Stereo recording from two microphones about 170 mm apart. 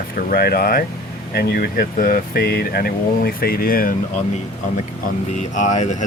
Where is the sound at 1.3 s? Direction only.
70° left (ahead or behind).